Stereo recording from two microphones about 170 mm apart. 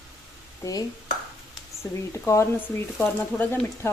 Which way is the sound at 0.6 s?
20° left (ahead or behind).